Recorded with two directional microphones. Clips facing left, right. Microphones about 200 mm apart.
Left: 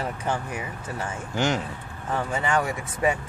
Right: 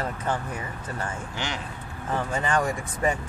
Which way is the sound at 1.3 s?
45° left (ahead or behind).